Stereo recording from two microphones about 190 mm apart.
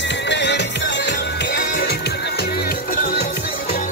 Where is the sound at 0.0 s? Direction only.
70° left (ahead or behind).